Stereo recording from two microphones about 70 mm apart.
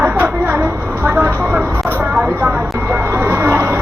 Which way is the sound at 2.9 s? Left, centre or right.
Right.